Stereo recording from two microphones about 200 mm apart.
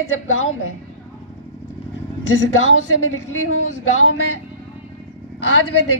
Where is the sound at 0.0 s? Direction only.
85° left.